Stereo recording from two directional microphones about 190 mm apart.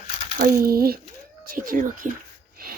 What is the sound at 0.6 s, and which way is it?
Speech, 55° right (ahead or behind).